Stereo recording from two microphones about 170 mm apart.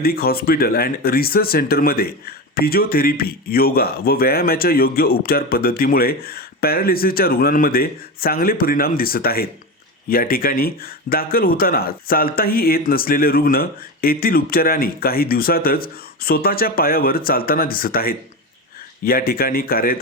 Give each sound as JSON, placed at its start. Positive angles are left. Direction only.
{"t": 0.0, "sound": "speech", "side_deg": 65}